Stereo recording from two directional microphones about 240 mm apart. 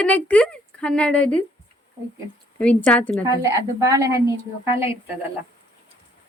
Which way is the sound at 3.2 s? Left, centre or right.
Centre.